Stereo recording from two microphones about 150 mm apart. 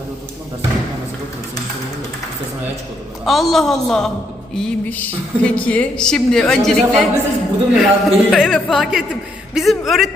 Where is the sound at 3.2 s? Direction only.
Centre (ahead or behind).